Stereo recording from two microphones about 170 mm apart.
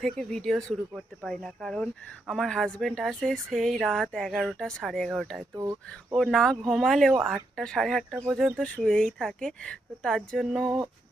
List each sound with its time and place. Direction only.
0.0 s speech: 5° left (ahead or behind)
5.5 s speech: 20° right (ahead or behind)
6.1 s speech: centre (ahead or behind)